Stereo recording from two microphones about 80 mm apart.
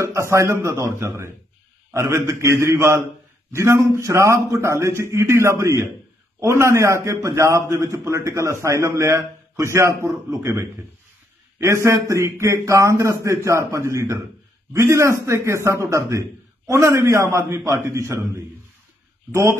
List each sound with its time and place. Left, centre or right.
0.0 s a man's voice: right